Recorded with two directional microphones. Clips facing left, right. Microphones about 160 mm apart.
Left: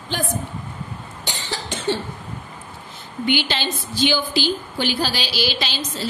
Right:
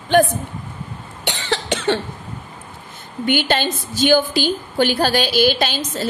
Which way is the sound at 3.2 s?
45° right (ahead or behind).